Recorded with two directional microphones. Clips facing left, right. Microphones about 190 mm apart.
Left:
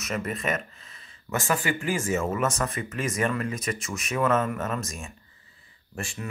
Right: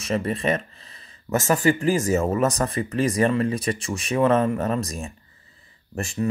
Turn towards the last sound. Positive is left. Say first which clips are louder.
# right 9 dB
turn(degrees=-40)  # may be behind; listen again after turning